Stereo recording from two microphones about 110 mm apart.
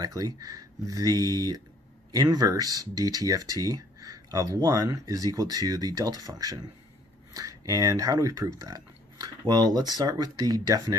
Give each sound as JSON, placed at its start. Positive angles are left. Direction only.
{"t": 0.0, "sound": "speech", "side_deg": -35}